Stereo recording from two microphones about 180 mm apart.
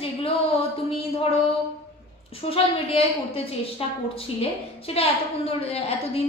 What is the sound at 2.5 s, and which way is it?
A woman's voice, 30° left (ahead or behind).